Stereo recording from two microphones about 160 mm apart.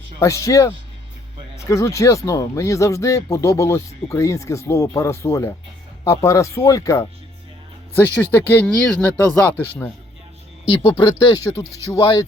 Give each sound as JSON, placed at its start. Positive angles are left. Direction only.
{"t": 0.2, "sound": "speech", "side_deg": 20}
{"t": 11.9, "sound": "speech", "side_deg": 20}